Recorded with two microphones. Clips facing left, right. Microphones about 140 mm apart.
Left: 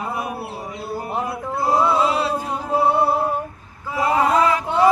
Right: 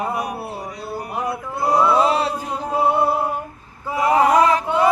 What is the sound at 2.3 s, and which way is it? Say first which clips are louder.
Male singing: left 2 dB; 25° left (ahead or behind).